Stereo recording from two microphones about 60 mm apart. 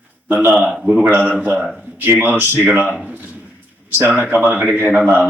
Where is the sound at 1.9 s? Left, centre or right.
Right.